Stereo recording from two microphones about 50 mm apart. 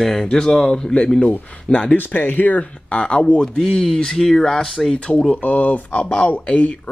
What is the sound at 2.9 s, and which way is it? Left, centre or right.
Speech, left.